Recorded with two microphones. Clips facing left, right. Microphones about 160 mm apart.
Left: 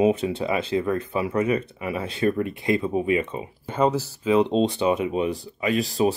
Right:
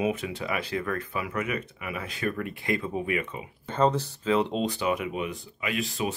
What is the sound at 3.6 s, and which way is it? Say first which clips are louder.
Speech: left 2 dB; 10° left (ahead or behind).